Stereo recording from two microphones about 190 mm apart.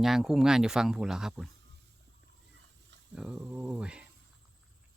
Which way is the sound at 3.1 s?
5° right (ahead or behind).